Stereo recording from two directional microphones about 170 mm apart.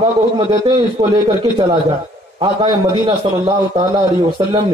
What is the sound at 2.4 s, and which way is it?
A man's voice, 30° right (ahead or behind).